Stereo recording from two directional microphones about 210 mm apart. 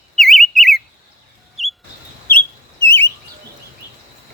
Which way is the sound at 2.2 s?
10° left (ahead or behind).